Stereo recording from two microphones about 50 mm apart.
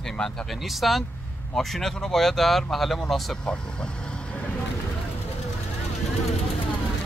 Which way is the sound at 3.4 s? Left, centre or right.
Centre.